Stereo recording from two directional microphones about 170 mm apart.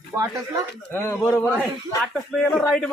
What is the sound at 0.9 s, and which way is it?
Speech, 15° left (ahead or behind).